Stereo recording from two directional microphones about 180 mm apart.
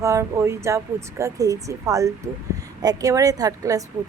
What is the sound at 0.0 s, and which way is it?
A woman's voice, 15° right (ahead or behind).